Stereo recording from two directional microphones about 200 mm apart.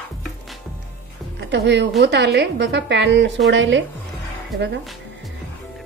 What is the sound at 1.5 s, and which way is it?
Speech, 55° right (ahead or behind).